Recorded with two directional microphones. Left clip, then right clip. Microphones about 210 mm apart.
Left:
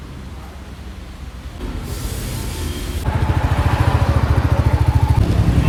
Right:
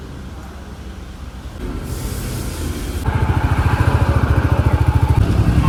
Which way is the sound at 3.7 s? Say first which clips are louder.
Even; 45° left (ahead or behind).